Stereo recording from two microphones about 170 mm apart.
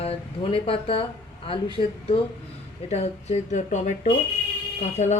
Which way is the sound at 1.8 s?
35° left (ahead or behind).